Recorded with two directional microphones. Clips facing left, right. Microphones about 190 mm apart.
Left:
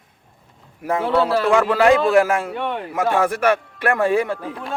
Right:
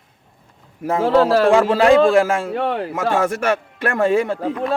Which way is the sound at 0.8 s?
30° right (ahead or behind).